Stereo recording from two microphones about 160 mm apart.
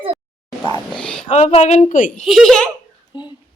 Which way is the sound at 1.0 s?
5° left (ahead or behind).